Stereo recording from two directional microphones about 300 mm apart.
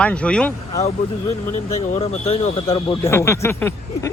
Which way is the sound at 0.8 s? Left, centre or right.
Left.